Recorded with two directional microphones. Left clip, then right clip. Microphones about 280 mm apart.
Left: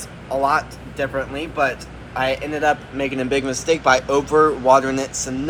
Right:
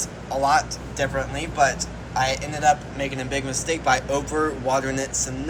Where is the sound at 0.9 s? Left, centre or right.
Centre.